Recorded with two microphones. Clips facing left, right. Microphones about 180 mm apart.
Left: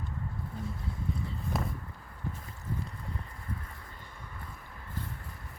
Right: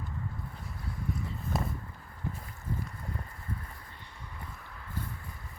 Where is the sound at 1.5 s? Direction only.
Centre (ahead or behind).